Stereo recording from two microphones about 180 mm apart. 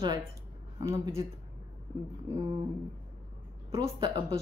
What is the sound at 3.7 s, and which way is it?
Speech, 20° right (ahead or behind).